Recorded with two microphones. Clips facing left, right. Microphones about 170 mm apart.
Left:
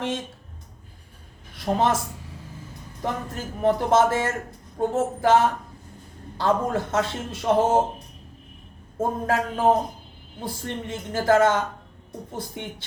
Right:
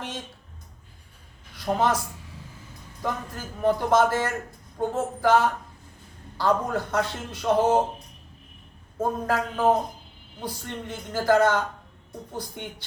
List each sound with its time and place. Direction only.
1.5 s a woman's voice: 25° left (ahead or behind)
3.0 s a man's voice: 25° left (ahead or behind)
9.0 s a man's voice: 25° left (ahead or behind)